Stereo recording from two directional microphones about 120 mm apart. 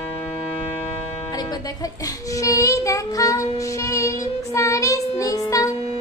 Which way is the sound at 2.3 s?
25° left (ahead or behind).